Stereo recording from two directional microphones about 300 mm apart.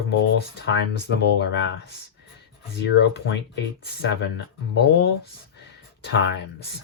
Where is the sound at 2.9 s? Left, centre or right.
Left.